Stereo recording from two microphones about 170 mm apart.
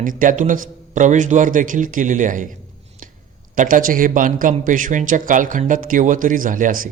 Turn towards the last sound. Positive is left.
turn(degrees=-55)  # may be behind; listen again after turning